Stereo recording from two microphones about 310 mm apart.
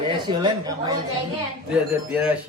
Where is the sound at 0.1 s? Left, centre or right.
Centre.